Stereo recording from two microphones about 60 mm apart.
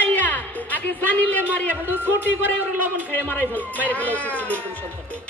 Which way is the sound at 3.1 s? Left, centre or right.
Left.